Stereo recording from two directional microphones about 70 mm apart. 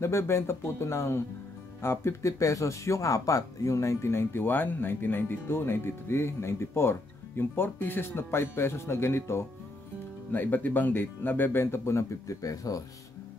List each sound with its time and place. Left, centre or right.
0.0 s speech: left
10.3 s speech: left